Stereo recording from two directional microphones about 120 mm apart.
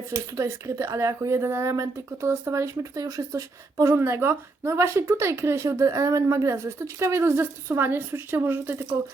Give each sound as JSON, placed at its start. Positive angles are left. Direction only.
{"t": 0.1, "sound": "speech", "side_deg": -25}